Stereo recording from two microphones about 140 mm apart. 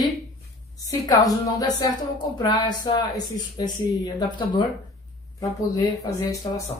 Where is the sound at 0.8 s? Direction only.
25° left (ahead or behind).